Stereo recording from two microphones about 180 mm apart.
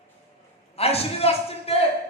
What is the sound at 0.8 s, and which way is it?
A man's voice, 35° left (ahead or behind).